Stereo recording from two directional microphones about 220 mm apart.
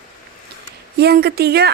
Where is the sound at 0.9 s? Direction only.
45° right (ahead or behind).